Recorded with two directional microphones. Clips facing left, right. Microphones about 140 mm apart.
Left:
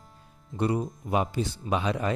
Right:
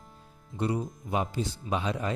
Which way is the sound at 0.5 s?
60° left (ahead or behind).